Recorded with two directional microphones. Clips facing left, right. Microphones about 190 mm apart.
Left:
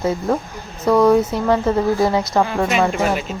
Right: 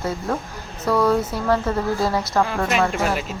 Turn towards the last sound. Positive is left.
turn(degrees=0)  # may be behind; listen again after turning